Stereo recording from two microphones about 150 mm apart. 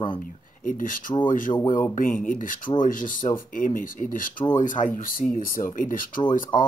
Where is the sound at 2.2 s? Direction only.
60° left (ahead or behind).